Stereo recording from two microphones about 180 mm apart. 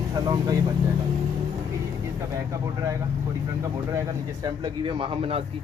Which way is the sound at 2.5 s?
15° right (ahead or behind).